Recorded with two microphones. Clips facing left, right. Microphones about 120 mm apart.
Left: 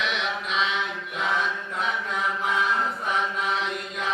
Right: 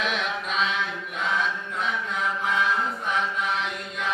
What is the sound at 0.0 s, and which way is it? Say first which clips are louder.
Mantra: right 1 dB; 45° right (ahead or behind).